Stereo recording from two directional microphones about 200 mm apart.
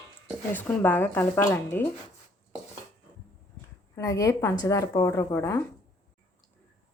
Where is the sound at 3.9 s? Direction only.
15° left (ahead or behind).